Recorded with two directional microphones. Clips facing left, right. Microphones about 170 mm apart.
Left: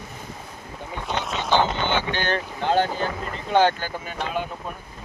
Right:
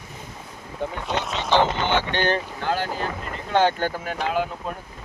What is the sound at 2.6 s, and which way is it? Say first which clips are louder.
Speech: left 6 dB; 25° left (ahead or behind).